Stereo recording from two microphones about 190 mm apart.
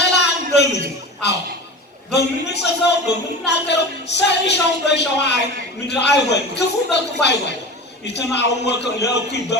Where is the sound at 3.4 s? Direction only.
65° left (ahead or behind).